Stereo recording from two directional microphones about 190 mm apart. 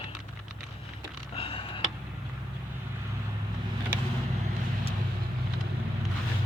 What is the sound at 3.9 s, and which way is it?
Vehicle, 10° right (ahead or behind).